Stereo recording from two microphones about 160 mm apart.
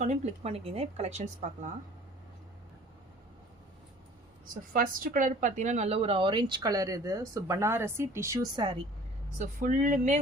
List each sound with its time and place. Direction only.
0.0 s a woman's voice: 45° right (ahead or behind)
4.7 s a woman's voice: 60° right (ahead or behind); by 8.6 s 15° right (ahead or behind)
9.4 s a woman's voice: 55° right (ahead or behind)